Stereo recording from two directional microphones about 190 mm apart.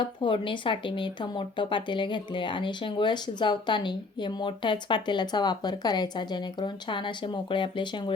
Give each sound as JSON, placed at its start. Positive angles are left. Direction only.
{"t": 0.0, "sound": "speech", "side_deg": 25}